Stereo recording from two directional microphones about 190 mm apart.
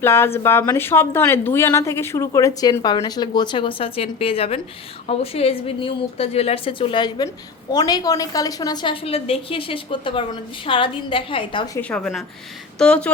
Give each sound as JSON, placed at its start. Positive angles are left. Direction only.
{"t": 0.0, "sound": "a woman's voice", "side_deg": 10}
{"t": 11.8, "sound": "a woman's voice", "side_deg": 5}